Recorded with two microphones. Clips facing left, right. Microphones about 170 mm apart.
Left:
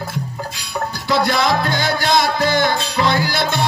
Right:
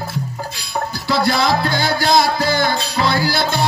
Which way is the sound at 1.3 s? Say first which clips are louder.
Right 1 dB; 35° right (ahead or behind).